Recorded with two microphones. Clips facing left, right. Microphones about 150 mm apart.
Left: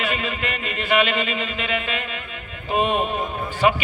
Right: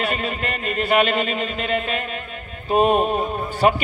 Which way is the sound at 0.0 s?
35° right (ahead or behind).